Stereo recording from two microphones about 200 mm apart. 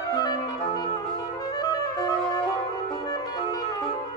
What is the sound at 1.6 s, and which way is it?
Clarinet, 20° left (ahead or behind).